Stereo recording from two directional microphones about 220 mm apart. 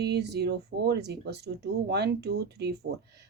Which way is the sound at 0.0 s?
50° right (ahead or behind).